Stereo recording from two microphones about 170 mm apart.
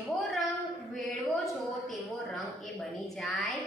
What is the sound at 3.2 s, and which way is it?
Speech, centre (ahead or behind).